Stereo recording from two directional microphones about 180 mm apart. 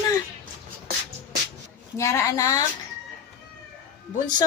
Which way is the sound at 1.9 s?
15° left (ahead or behind).